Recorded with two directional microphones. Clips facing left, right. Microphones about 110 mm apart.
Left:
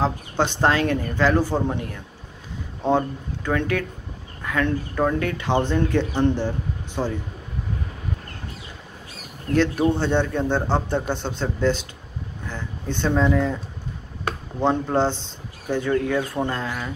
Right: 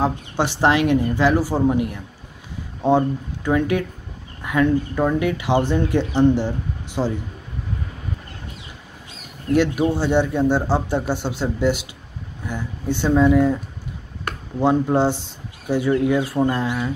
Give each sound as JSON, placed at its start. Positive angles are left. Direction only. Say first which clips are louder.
{"t": 0.0, "sound": "speech", "louder": "right 1 dB", "side_deg": -15}
{"t": 2.8, "sound": "speech", "louder": "right 4 dB", "side_deg": -15}
{"t": 4.4, "sound": "a sound", "louder": "right 5 dB", "side_deg": -20}
{"t": 4.6, "sound": "speech", "louder": "right 1 dB", "side_deg": -10}
{"t": 9.5, "sound": "speech", "louder": "right 2 dB", "side_deg": -15}
{"t": 14.6, "sound": "speech", "louder": "right 3 dB", "side_deg": -10}